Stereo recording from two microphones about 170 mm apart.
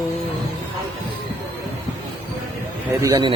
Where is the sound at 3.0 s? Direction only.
25° right (ahead or behind).